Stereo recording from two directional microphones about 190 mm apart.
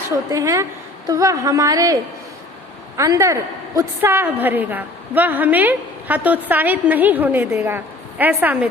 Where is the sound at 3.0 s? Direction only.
15° right (ahead or behind).